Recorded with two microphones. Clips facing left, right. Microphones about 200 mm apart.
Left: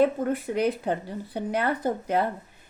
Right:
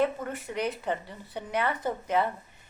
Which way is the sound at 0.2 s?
45° left (ahead or behind).